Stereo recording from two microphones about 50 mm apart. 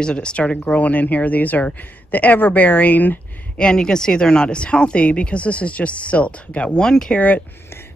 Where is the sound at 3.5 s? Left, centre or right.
Centre.